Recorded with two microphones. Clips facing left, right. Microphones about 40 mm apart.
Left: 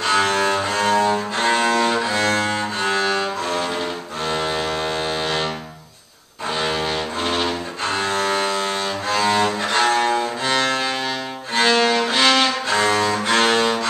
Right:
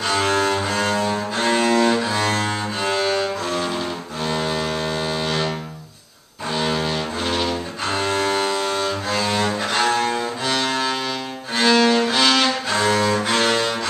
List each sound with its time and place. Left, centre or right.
0.0 s cello: centre
6.5 s music: centre
7.8 s cello: centre
13.4 s cello: centre